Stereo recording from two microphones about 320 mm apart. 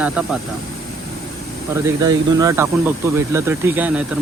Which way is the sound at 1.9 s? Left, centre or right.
Centre.